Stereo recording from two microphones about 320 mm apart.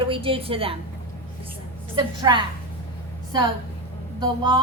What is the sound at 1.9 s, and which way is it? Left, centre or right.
Speech, centre.